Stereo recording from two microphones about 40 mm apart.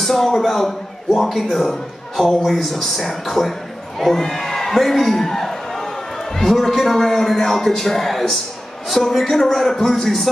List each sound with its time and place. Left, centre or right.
0.0 s a man's voice: centre
4.0 s crowd: centre
6.3 s a man's voice: centre